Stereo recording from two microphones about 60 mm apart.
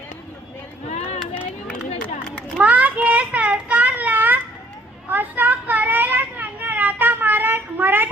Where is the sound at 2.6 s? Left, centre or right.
Right.